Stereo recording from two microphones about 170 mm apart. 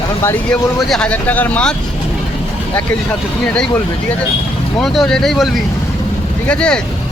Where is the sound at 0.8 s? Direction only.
5° left (ahead or behind).